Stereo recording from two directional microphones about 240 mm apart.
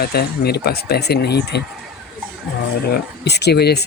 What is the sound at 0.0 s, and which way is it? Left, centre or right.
Speech, left.